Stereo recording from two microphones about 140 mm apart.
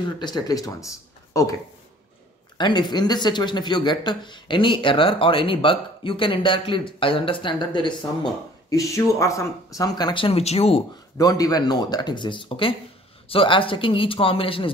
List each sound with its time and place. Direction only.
0.0 s speech: 30° left (ahead or behind); by 10.8 s 50° left (ahead or behind)
11.1 s speech: 25° left (ahead or behind)